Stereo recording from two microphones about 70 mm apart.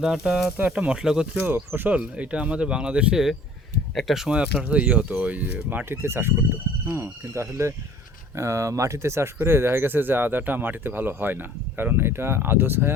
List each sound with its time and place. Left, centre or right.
0.0 s speech: centre
0.4 s speech: right
0.7 s speech: centre
1.3 s speech: right
2.0 s speech: centre
3.9 s speech: centre
4.6 s speech: centre; by 12.9 s right